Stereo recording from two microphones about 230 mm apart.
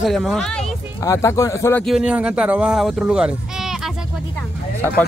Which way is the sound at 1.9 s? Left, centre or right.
Centre.